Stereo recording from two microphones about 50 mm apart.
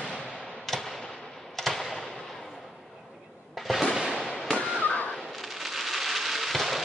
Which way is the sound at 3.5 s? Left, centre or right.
Centre.